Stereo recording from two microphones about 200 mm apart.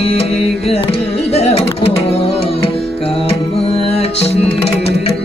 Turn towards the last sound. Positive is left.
turn(degrees=30)  # may be behind; listen again after turning